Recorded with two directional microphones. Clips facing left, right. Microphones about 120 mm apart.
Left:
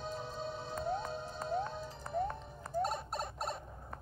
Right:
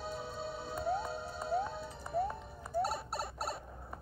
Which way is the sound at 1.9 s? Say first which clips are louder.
Right 1 dB; 5° right (ahead or behind).